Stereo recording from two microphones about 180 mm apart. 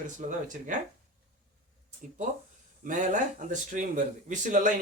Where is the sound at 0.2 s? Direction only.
45° right (ahead or behind).